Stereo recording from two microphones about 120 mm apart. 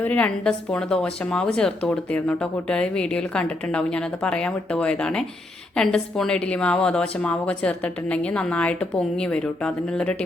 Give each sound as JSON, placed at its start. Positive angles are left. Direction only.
{"t": 0.0, "sound": "a woman's voice", "side_deg": 10}